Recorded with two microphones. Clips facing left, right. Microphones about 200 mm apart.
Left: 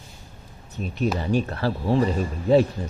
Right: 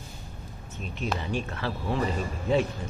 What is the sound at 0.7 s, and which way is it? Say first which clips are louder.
Speech: left 7 dB; 40° left (ahead or behind).